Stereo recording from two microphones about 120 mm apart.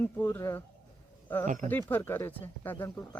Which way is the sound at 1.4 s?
90° right.